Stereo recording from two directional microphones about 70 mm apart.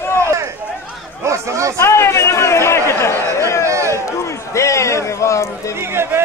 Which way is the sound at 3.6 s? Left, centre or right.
Right.